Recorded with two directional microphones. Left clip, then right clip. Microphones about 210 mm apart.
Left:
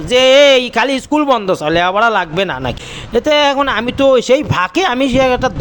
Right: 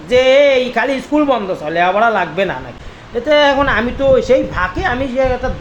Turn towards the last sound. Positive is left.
turn(degrees=45)  # may be behind; listen again after turning